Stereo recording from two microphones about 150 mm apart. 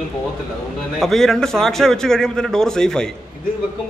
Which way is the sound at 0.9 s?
Centre (ahead or behind).